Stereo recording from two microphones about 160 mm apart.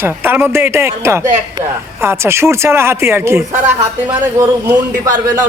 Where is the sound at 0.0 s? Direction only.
15° right (ahead or behind).